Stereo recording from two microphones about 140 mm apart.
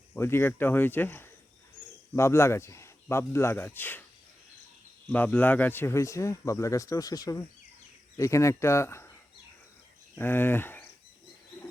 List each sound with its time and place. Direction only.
0.1 s speech: 15° left (ahead or behind)
5.0 s speech: 10° left (ahead or behind)
10.2 s speech: 15° left (ahead or behind)